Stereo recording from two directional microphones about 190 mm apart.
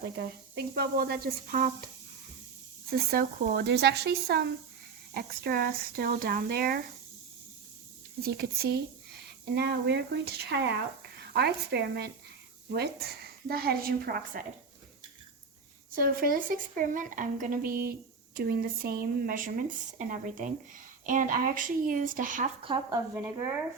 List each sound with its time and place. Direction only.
0.0 s speech: 60° right (ahead or behind)
2.9 s speech: 50° right (ahead or behind)
8.2 s speech: 55° right (ahead or behind)
16.0 s speech: 50° right (ahead or behind)
22.6 s speech: 20° right (ahead or behind)